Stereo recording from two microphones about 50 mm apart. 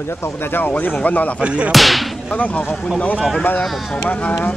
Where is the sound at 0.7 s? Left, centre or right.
Left.